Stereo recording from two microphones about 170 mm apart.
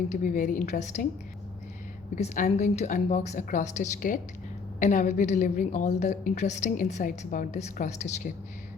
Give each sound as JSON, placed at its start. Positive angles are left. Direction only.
{"t": 0.1, "sound": "a woman's voice", "side_deg": 50}
{"t": 2.1, "sound": "a woman's voice", "side_deg": 40}